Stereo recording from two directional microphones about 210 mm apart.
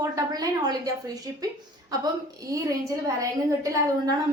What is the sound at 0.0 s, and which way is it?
A woman's voice, 15° right (ahead or behind).